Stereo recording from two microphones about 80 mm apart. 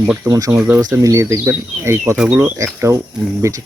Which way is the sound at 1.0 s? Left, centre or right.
Right.